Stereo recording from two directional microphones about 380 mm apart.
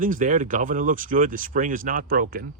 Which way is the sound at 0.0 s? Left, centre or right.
Right.